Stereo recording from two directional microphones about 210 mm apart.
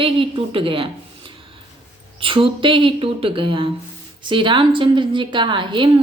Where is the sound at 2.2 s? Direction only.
25° right (ahead or behind).